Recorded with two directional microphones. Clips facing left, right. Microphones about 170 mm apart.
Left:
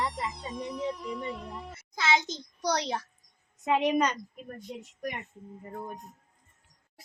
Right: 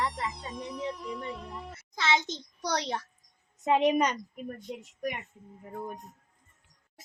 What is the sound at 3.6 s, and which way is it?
Speech, 25° right (ahead or behind).